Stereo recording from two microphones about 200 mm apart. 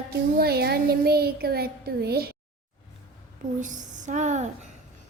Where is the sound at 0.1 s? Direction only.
50° right (ahead or behind).